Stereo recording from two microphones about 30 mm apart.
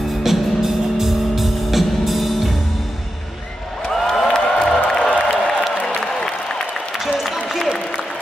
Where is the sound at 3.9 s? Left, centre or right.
Centre.